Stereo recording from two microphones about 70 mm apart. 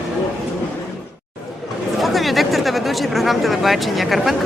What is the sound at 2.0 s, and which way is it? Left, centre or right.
Speech, centre.